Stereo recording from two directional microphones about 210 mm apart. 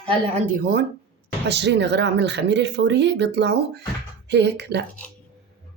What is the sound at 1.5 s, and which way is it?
A woman's voice, 55° right (ahead or behind).